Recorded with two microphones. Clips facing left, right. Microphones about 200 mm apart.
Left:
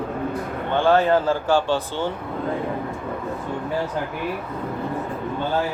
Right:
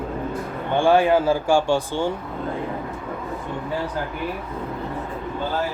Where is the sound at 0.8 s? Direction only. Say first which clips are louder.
Right 1 dB; 10° right (ahead or behind).